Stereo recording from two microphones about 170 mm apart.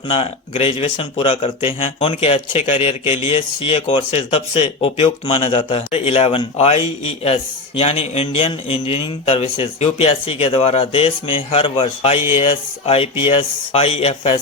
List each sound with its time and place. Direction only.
0.1 s a man's voice: 35° left (ahead or behind)